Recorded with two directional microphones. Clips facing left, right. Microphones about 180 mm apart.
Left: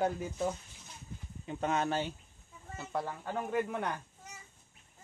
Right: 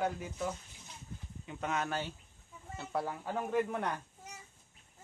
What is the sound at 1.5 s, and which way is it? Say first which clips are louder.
Speech: left 4 dB; 35° left (ahead or behind).